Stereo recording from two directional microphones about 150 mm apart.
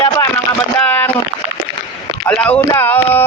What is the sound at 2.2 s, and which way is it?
Speech, 10° left (ahead or behind).